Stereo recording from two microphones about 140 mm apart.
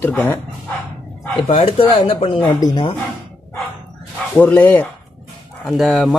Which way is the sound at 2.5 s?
30° left (ahead or behind).